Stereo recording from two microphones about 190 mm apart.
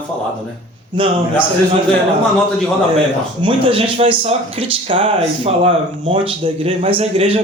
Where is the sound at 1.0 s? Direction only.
30° right (ahead or behind).